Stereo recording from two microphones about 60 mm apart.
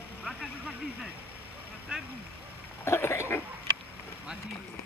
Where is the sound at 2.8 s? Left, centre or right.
Left.